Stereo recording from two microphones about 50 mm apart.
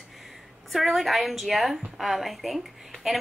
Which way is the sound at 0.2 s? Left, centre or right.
Centre.